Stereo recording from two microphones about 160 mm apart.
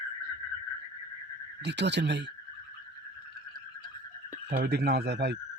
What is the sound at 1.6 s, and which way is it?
Speech, 90° right.